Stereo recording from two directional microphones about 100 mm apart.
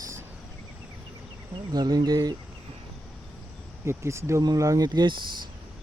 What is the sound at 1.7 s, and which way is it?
Speech, 45° right (ahead or behind).